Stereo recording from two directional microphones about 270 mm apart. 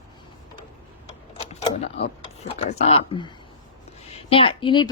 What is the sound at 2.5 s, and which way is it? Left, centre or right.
Speech, left.